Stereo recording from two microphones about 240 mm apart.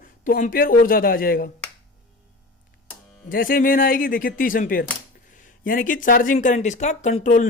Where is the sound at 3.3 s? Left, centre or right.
Left.